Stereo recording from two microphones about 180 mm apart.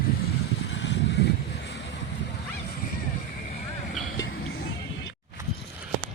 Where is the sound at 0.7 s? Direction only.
80° left.